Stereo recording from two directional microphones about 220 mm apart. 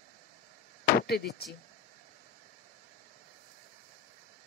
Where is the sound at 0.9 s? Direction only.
45° left (ahead or behind).